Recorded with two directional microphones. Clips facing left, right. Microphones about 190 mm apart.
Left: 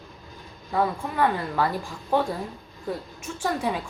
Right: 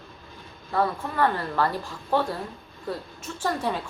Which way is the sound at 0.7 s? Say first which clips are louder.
Even; 10° left (ahead or behind).